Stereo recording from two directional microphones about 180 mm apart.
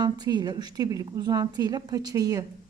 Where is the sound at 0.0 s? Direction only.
25° right (ahead or behind).